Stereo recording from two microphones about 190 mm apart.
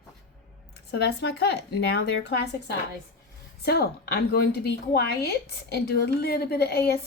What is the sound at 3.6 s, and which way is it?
A woman's voice, 55° left (ahead or behind).